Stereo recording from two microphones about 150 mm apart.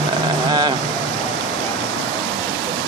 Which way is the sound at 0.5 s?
30° right (ahead or behind).